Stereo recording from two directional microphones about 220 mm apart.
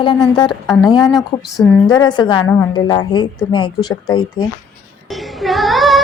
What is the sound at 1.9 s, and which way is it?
Speech, 20° left (ahead or behind).